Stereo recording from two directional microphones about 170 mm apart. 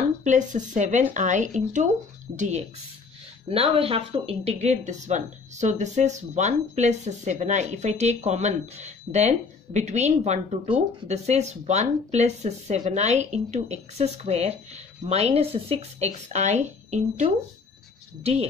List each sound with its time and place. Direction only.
0.2 s speech: 45° right (ahead or behind)
3.4 s speech: 35° right (ahead or behind)